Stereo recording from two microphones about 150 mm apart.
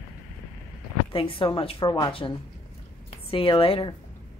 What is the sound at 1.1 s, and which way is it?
Speech, 35° left (ahead or behind).